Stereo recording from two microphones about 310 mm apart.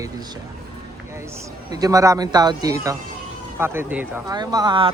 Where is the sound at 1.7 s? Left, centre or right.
Centre.